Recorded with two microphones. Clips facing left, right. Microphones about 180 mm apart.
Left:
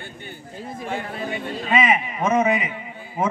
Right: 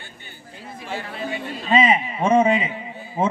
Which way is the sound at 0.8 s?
50° left (ahead or behind).